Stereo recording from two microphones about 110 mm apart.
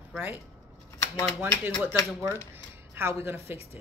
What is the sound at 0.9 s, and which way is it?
Shuffling cards, 25° left (ahead or behind).